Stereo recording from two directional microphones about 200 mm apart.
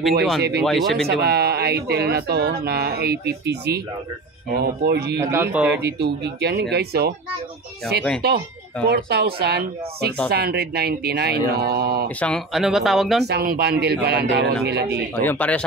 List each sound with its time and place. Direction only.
0.4 s speech: 55° right (ahead or behind)
0.7 s speech: centre (ahead or behind)
1.0 s speech: 55° right (ahead or behind)
5.2 s speech: 10° right (ahead or behind)
5.8 s speech: 55° right (ahead or behind)
8.8 s speech: 55° right (ahead or behind)
12.2 s speech: 5° left (ahead or behind)
13.2 s a man's voice: 50° right (ahead or behind)
15.2 s speech: 5° left (ahead or behind)